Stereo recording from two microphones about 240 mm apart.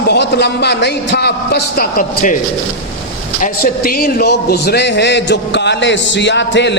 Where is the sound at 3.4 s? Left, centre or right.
Left.